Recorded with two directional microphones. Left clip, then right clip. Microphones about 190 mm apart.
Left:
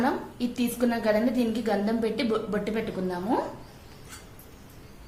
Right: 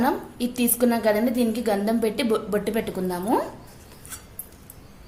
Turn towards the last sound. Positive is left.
turn(degrees=-45)  # may be behind; listen again after turning